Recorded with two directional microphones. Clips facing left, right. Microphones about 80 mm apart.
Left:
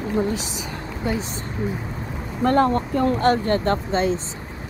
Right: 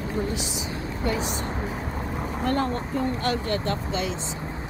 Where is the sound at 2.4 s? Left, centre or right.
Left.